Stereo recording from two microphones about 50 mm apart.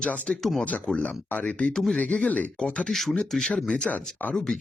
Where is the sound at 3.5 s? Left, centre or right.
Centre.